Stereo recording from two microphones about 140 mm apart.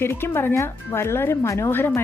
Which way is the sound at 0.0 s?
15° left (ahead or behind).